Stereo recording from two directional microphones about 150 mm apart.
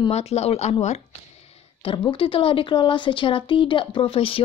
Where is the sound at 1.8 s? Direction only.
35° left (ahead or behind).